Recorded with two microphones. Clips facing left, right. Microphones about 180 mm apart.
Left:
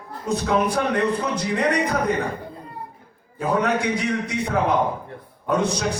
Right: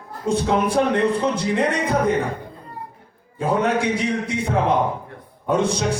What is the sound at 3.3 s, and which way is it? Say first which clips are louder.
A man's voice: right 2 dB; 25° right (ahead or behind).